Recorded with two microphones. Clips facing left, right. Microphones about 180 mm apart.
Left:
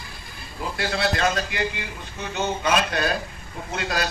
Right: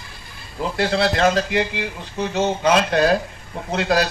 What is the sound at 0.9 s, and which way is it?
Speech, 80° right.